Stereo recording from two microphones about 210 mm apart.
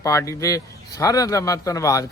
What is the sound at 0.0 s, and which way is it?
Speech, 15° left (ahead or behind).